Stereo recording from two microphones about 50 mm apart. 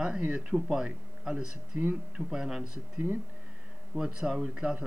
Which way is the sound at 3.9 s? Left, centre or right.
Centre.